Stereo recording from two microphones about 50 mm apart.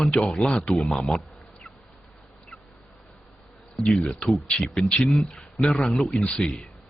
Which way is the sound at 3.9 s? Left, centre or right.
Centre.